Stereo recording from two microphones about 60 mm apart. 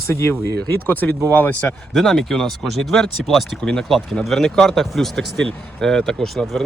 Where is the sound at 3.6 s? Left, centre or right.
Centre.